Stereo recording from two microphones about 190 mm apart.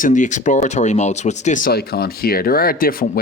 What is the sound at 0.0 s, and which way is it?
Speech, 40° left (ahead or behind).